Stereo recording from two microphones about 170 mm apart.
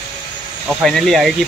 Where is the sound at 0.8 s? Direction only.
Centre (ahead or behind).